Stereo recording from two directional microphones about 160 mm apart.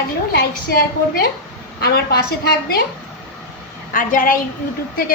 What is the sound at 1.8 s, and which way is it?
A woman's voice, 85° left.